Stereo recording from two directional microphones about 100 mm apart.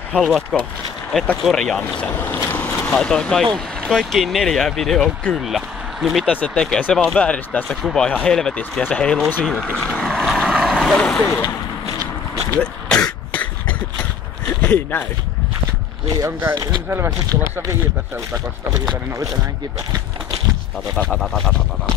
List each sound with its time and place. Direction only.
0.1 s speech: centre (ahead or behind)
6.2 s speech: 10° left (ahead or behind)
9.8 s vehicle: 5° left (ahead or behind)
11.0 s speech: 15° left (ahead or behind)
12.5 s throat clearing: 10° left (ahead or behind)
14.6 s speech: 15° left (ahead or behind)
16.2 s speech: 25° right (ahead or behind)
20.9 s speech: 5° left (ahead or behind)